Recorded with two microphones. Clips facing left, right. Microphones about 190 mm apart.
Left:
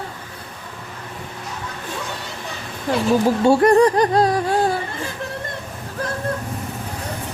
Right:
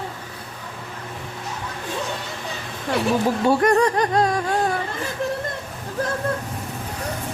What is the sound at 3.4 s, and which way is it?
A child's voice, 30° left (ahead or behind).